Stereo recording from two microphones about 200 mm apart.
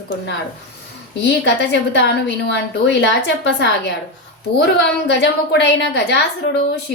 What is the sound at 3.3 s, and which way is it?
Speech, 60° left (ahead or behind).